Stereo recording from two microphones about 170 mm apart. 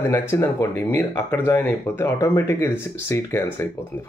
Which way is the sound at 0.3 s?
15° left (ahead or behind).